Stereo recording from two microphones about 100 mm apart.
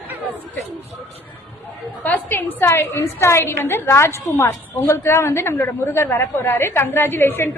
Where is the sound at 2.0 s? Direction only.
20° left (ahead or behind).